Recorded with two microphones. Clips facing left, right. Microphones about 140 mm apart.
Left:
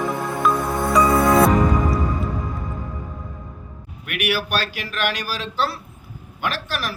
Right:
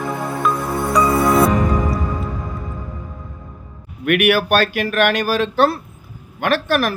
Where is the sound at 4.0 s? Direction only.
60° right (ahead or behind).